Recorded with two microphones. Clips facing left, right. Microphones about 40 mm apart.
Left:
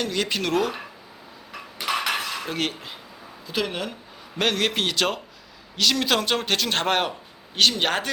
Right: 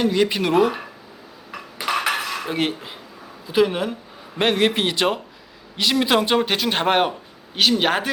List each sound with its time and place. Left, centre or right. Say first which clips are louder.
0.0 s a man's voice: right 6 dB; centre
1.9 s dishes: right 3 dB; right
2.4 s a man's voice: right 4 dB; centre